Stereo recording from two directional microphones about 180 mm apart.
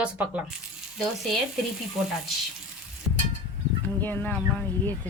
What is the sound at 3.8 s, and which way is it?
Speech, 10° left (ahead or behind).